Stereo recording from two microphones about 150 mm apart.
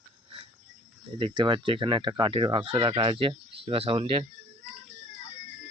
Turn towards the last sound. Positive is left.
turn(degrees=-40)  # may be behind; listen again after turning